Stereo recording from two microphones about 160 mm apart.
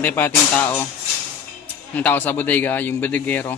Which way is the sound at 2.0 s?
10° left (ahead or behind).